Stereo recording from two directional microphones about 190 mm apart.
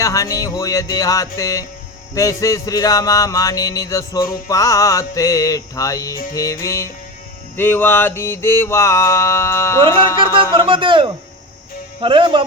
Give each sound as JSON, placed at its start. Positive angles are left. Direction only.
{"t": 0.0, "sound": "music", "side_deg": 15}
{"t": 10.7, "sound": "speech", "side_deg": -25}